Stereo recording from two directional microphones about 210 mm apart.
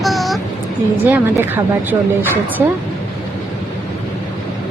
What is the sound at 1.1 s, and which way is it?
Speech, 10° right (ahead or behind).